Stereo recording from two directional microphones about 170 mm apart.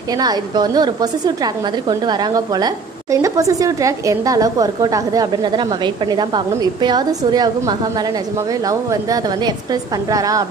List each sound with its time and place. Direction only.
0.2 s a woman's voice: 25° right (ahead or behind)